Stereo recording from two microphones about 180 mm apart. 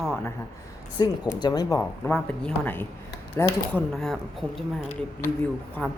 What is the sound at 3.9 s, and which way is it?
A man's voice, centre (ahead or behind).